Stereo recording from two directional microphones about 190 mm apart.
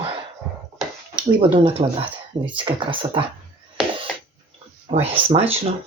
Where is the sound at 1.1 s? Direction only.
30° right (ahead or behind).